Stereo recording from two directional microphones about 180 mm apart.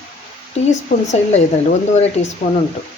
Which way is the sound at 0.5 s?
40° left (ahead or behind).